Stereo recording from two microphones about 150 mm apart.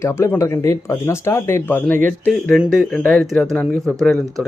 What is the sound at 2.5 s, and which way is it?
Speech, centre (ahead or behind).